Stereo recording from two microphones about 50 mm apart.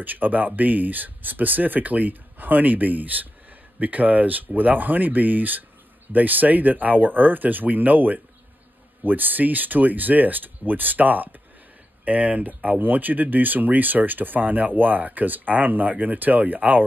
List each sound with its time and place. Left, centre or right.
0.0 s speech: right